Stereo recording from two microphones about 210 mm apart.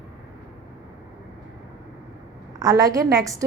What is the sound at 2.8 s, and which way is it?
Speech, 15° right (ahead or behind).